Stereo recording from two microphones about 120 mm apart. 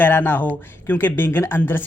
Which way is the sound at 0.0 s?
15° left (ahead or behind).